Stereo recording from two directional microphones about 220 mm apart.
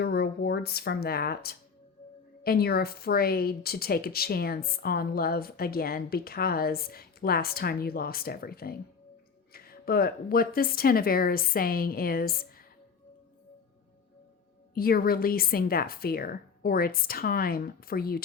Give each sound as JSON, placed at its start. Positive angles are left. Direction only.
{"t": 0.0, "sound": "speech", "side_deg": 45}
{"t": 14.8, "sound": "speech", "side_deg": 40}